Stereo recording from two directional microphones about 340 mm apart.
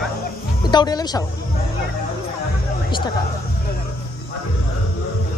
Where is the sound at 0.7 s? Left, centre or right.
Centre.